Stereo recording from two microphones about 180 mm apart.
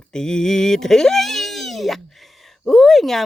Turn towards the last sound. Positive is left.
turn(degrees=0)  # may be behind; listen again after turning